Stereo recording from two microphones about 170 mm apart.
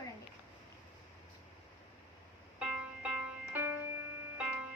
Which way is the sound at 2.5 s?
10° right (ahead or behind).